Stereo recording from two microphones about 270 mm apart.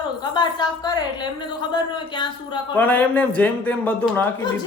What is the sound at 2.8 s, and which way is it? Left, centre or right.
A man's voice, centre.